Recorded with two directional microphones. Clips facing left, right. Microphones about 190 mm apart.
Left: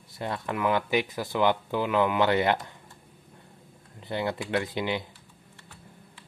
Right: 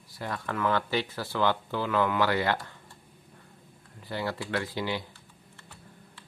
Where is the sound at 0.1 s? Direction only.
20° left (ahead or behind).